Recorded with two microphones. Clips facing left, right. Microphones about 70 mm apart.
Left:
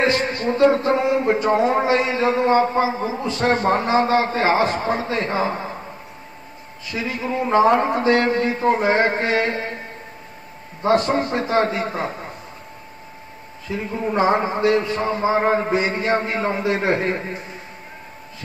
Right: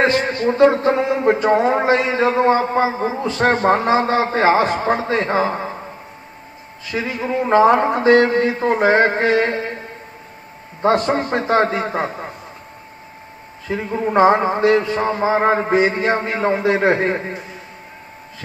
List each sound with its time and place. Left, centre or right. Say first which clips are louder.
0.0 s a man's voice: right 3 dB; right
6.9 s a man's voice: right 3 dB; right
11.1 s a man's voice: right 3 dB; right
13.7 s a man's voice: right 3 dB; right